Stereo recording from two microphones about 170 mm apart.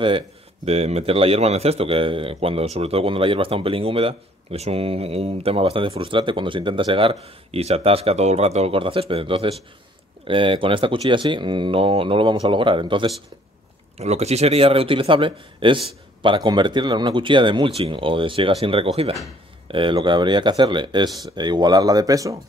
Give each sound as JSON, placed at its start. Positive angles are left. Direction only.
{"t": 0.7, "sound": "a man's voice", "side_deg": -35}
{"t": 13.9, "sound": "a man's voice", "side_deg": -40}